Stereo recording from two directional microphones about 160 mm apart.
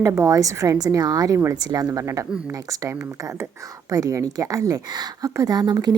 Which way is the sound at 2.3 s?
5° right (ahead or behind).